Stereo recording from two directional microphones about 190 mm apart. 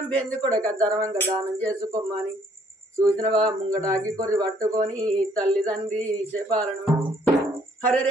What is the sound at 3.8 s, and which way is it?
Speech, 5° left (ahead or behind).